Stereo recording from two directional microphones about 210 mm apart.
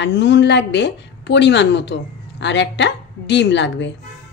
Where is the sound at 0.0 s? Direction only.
55° left (ahead or behind).